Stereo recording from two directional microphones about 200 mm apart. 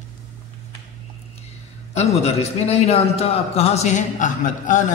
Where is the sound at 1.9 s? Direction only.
35° left (ahead or behind).